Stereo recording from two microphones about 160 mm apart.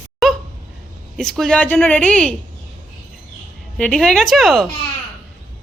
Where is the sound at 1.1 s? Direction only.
Centre (ahead or behind).